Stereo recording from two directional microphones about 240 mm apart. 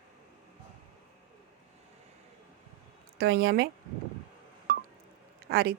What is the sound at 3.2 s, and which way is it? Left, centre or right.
Speech, right.